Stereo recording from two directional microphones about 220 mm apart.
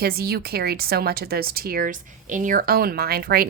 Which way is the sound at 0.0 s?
45° right (ahead or behind).